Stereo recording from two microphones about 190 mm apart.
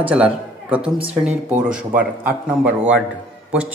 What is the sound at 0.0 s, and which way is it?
A man's voice, 5° right (ahead or behind).